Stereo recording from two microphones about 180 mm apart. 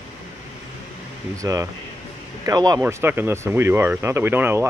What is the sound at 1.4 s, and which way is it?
Speech, 20° right (ahead or behind).